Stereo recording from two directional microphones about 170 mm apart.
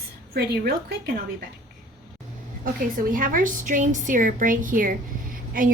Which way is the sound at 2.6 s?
55° right (ahead or behind).